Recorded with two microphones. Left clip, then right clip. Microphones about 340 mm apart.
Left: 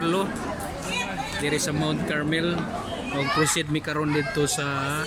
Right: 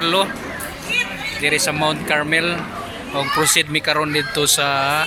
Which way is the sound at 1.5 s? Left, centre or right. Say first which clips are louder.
Right 10 dB; centre.